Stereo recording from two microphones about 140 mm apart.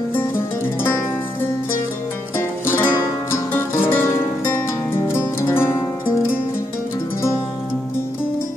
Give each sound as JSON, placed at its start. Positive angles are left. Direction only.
{"t": 2.6, "sound": "music", "side_deg": 15}